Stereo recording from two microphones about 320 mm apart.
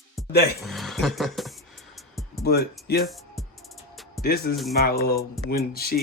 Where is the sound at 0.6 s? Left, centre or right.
Centre.